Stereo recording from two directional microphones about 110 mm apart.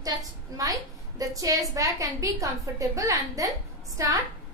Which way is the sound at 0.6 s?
30° right (ahead or behind).